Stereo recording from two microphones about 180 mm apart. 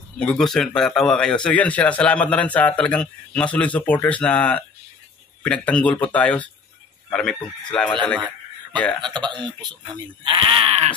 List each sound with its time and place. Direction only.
0.2 s speech: 5° left (ahead or behind)
9.0 s speech: 25° right (ahead or behind)